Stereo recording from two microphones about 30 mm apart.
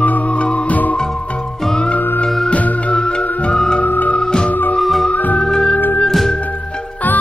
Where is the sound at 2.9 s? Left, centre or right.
Left.